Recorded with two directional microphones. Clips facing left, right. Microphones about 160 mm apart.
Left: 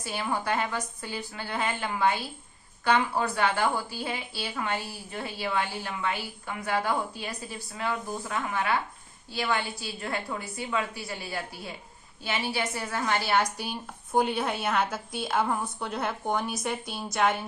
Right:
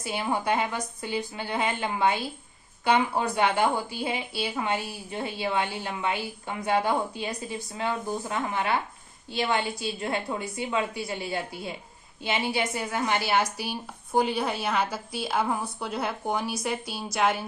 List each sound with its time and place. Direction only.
0.0 s a woman's voice: 20° right (ahead or behind); by 17.4 s centre (ahead or behind)